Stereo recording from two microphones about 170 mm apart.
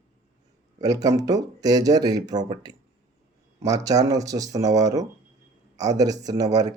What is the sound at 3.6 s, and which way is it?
Speech, 20° right (ahead or behind).